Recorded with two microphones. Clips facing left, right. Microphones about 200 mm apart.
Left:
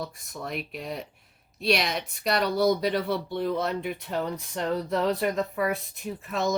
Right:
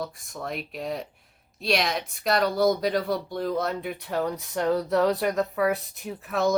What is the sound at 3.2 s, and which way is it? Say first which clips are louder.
Speech: left 1 dB; 45° right (ahead or behind).